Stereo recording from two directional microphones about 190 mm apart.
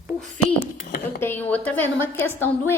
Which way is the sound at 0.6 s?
55° left (ahead or behind).